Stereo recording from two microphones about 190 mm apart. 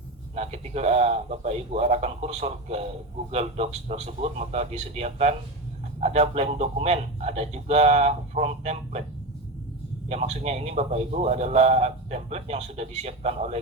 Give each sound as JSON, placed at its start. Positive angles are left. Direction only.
{"t": 0.3, "sound": "a man's voice", "side_deg": -35}
{"t": 10.1, "sound": "a man's voice", "side_deg": -35}